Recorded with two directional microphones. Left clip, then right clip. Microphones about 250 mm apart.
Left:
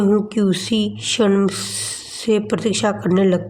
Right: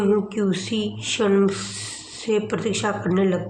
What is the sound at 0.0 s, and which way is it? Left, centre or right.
A woman's voice, left.